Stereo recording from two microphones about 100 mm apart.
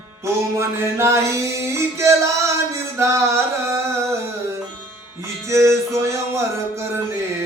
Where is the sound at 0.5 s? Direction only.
30° right (ahead or behind).